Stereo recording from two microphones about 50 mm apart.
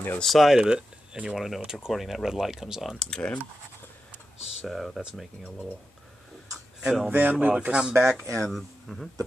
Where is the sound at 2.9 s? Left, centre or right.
Centre.